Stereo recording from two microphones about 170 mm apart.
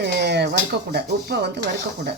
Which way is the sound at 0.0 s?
80° right.